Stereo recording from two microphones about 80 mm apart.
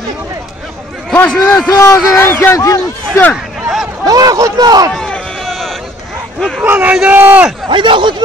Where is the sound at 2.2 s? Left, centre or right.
Left.